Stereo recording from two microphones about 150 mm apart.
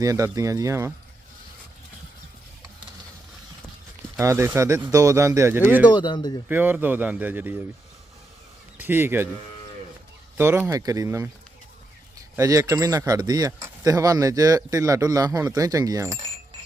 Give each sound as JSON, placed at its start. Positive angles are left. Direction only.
{"t": 0.0, "sound": "speech", "side_deg": -20}
{"t": 4.2, "sound": "speech", "side_deg": -20}
{"t": 5.9, "sound": "speech", "side_deg": 30}
{"t": 6.5, "sound": "a man's voice", "side_deg": -10}
{"t": 8.8, "sound": "a man's voice", "side_deg": -15}
{"t": 10.3, "sound": "speech", "side_deg": -15}
{"t": 12.4, "sound": "speech", "side_deg": -20}